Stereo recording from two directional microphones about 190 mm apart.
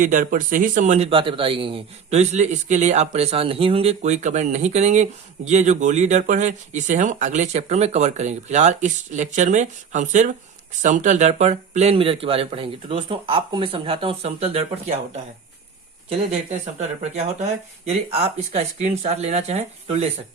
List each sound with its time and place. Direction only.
0.0 s speech: 40° right (ahead or behind)
16.0 s speech: 35° right (ahead or behind)